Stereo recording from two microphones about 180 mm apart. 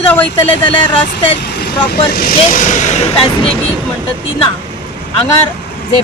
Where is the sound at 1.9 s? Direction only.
55° left (ahead or behind); by 3.5 s 35° left (ahead or behind).